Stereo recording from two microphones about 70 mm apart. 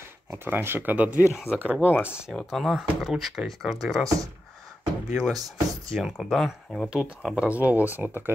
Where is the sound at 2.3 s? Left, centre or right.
Centre.